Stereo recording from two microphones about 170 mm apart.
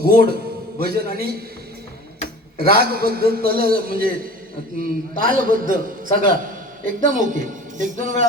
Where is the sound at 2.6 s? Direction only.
65° right (ahead or behind).